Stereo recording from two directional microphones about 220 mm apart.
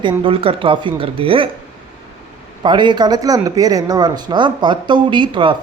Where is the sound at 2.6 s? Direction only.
20° right (ahead or behind).